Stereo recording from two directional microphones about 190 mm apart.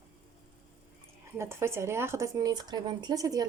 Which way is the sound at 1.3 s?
15° right (ahead or behind).